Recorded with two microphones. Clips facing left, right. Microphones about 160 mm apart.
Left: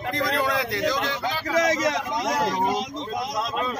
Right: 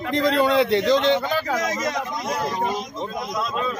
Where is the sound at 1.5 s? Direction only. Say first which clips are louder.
Left 2 dB; 90° left.